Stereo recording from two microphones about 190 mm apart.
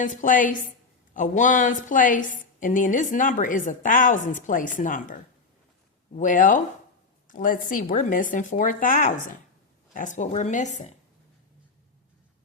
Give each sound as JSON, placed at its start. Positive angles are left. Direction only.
{"t": 0.0, "sound": "speech", "side_deg": 45}